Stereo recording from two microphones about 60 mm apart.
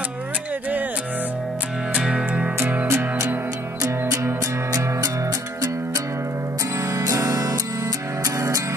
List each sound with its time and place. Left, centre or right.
2.0 s music: centre
2.9 s music: right
6.8 s music: right